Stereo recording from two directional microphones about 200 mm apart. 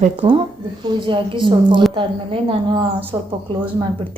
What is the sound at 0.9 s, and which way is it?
Speech, 25° right (ahead or behind).